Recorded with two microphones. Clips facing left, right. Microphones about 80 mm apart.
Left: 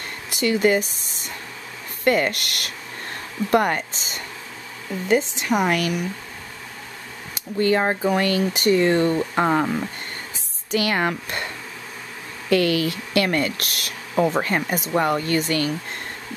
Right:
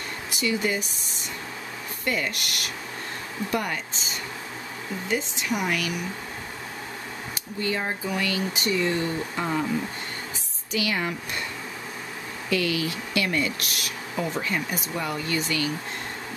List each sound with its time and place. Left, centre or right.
0.4 s speech: left
2.0 s speech: left
5.0 s speech: left
7.5 s speech: left
10.7 s speech: left
12.4 s speech: left